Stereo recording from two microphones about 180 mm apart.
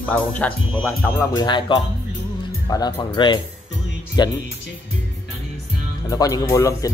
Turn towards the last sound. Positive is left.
turn(degrees=20)  # may be behind; listen again after turning